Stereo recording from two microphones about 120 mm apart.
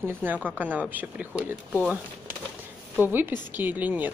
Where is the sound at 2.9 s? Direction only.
15° right (ahead or behind).